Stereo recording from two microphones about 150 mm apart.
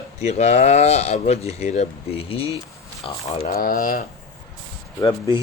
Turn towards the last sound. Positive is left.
turn(degrees=25)  # may be behind; listen again after turning